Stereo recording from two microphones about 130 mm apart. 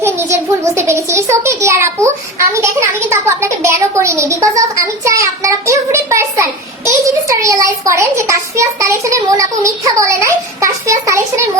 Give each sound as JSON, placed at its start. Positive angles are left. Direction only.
{"t": 0.0, "sound": "a child's voice", "side_deg": -20}